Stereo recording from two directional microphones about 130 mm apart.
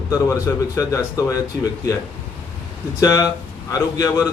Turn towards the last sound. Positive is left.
turn(degrees=25)  # may be behind; listen again after turning